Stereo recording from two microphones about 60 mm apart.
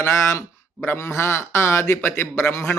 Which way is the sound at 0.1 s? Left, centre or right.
Left.